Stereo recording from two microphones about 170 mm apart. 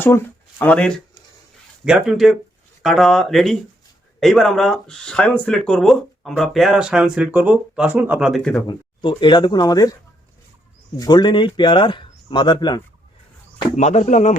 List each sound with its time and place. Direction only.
0.6 s speech: 10° left (ahead or behind)
1.8 s speech: 5° right (ahead or behind)
8.6 s speech: 30° left (ahead or behind)
10.9 s speech: 25° left (ahead or behind)
13.7 s speech: 40° left (ahead or behind)